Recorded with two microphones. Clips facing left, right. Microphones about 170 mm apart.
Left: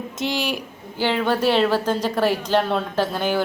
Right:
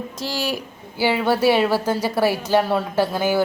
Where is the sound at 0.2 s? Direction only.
20° left (ahead or behind).